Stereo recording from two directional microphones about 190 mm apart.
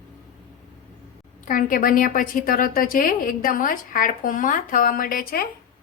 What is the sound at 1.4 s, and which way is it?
A woman's voice, 45° left (ahead or behind).